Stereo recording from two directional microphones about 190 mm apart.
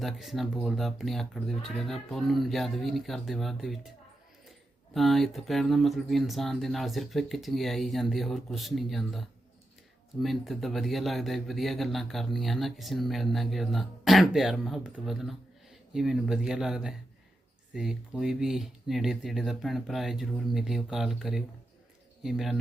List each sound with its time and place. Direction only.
0.0 s speech: centre (ahead or behind)
4.9 s speech: centre (ahead or behind)